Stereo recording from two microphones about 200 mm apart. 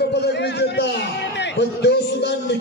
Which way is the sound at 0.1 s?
55° left (ahead or behind).